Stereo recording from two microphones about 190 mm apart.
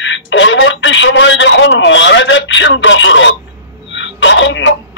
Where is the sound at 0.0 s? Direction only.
75° left (ahead or behind).